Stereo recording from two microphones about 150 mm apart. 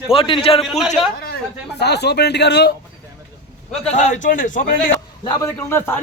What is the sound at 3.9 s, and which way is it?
Speech, 55° left (ahead or behind).